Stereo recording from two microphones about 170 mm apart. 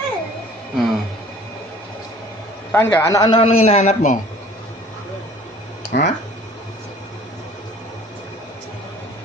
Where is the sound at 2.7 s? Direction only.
15° left (ahead or behind); by 4.2 s 45° left (ahead or behind).